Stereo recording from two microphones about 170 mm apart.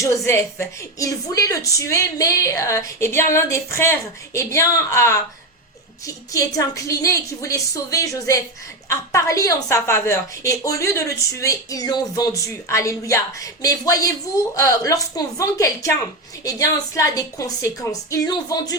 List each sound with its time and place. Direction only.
0.0 s a woman's voice: 15° left (ahead or behind)